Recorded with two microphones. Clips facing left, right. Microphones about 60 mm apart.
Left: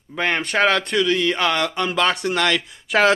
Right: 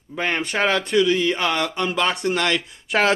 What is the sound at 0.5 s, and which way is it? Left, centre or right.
Speech, left.